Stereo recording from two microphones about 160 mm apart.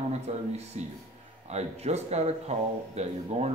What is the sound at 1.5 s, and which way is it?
Speech, 45° right (ahead or behind).